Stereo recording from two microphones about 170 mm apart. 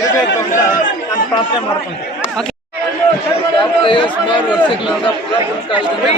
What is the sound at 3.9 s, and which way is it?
Speech, 30° left (ahead or behind).